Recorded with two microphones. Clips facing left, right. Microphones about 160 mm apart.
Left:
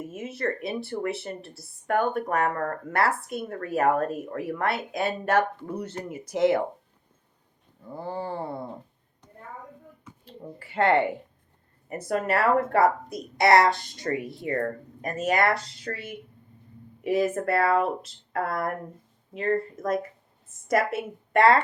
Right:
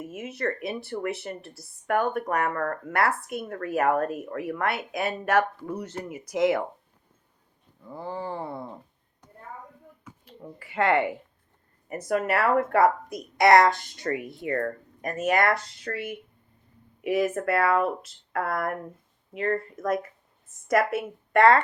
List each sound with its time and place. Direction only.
0.2 s speech: 30° left (ahead or behind)
7.9 s speech: 35° left (ahead or behind)
10.2 s speech: 30° left (ahead or behind)
13.8 s speech: 45° right (ahead or behind)
14.6 s speech: 30° left (ahead or behind)
17.0 s speech: 30° left (ahead or behind)
19.8 s speech: 50° right (ahead or behind)
20.7 s speech: 25° left (ahead or behind)